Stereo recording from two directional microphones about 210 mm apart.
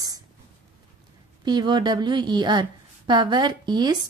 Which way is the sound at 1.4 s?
20° right (ahead or behind).